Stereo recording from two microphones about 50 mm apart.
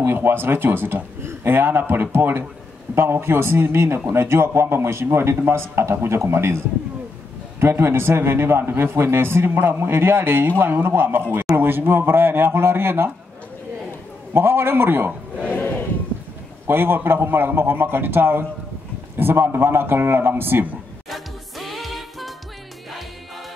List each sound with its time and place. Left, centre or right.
0.0 s a man's voice: right
7.6 s a man's voice: right
14.3 s a man's voice: right
15.4 s a sound: left
16.6 s a man's voice: right
21.1 s music: centre